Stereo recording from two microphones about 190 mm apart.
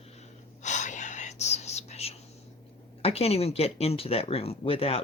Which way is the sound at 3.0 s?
30° left (ahead or behind).